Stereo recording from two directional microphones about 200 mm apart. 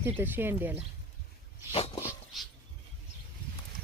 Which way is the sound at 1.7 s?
30° left (ahead or behind).